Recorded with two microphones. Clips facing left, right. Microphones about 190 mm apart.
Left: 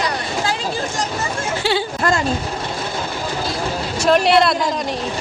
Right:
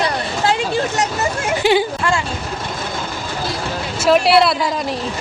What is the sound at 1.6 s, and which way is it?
Speech, 15° right (ahead or behind).